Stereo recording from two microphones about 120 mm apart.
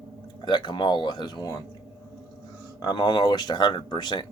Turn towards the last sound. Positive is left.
turn(degrees=40)  # may be behind; listen again after turning